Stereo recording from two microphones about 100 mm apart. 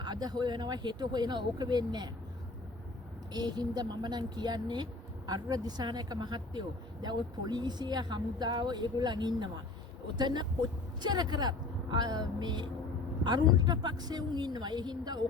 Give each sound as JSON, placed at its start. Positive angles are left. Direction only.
{"t": 0.0, "sound": "speech", "side_deg": -45}
{"t": 3.3, "sound": "speech", "side_deg": -45}